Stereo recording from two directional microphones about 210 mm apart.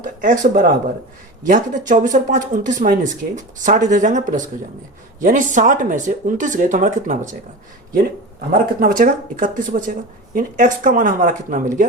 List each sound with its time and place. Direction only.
0.0 s speech: 40° right (ahead or behind)
8.8 s speech: 40° right (ahead or behind)